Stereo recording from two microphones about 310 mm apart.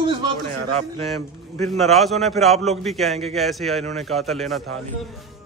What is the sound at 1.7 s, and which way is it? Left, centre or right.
A man's voice, centre.